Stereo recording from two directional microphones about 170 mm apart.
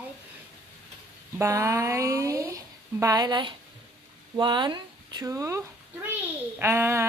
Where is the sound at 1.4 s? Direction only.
15° right (ahead or behind).